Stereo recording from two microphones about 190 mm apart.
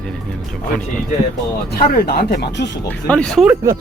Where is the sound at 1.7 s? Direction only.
50° left (ahead or behind).